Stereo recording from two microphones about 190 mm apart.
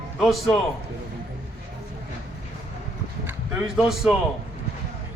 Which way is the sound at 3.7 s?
Centre (ahead or behind).